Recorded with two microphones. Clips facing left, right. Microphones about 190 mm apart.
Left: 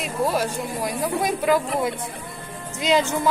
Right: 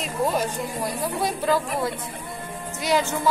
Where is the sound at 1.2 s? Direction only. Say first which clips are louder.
Left 2 dB; 15° left (ahead or behind).